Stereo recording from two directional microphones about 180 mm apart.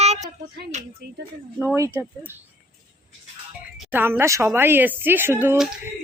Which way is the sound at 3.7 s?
5° right (ahead or behind).